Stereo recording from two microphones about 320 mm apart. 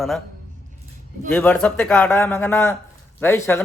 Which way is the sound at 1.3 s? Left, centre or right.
Centre.